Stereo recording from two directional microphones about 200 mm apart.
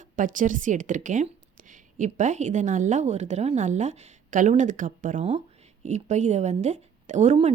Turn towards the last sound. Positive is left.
turn(degrees=-35)  # may be behind; listen again after turning